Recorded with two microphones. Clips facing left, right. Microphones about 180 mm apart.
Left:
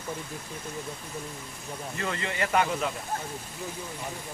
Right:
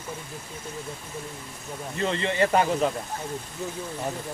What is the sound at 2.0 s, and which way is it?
Speech, 25° right (ahead or behind).